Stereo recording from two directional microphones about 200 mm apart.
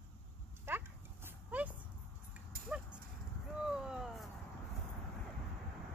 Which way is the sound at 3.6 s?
5° right (ahead or behind).